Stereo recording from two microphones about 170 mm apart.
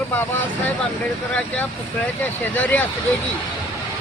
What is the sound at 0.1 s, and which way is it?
Speech, 10° left (ahead or behind).